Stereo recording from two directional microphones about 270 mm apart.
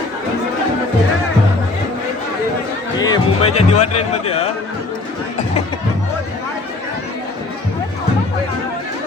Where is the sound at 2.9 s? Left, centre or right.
Centre.